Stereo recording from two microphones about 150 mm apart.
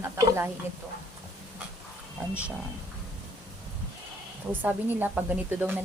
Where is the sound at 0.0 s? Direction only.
15° right (ahead or behind).